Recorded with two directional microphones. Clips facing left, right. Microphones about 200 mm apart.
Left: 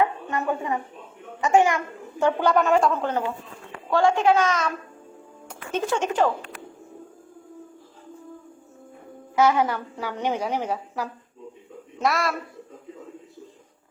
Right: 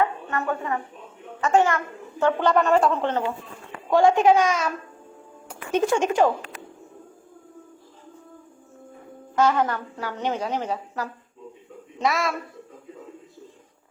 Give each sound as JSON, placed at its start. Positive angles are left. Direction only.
{"t": 0.0, "sound": "a sound", "side_deg": 20}
{"t": 1.4, "sound": "a woman's voice", "side_deg": 15}
{"t": 2.4, "sound": "a woman's voice", "side_deg": 0}
{"t": 3.8, "sound": "a child's voice", "side_deg": -15}
{"t": 9.3, "sound": "a woman's voice", "side_deg": 10}
{"t": 11.9, "sound": "a woman's voice", "side_deg": 0}